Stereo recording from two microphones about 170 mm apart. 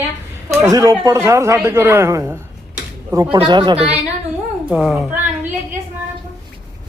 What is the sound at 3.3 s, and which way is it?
Speech, 25° right (ahead or behind).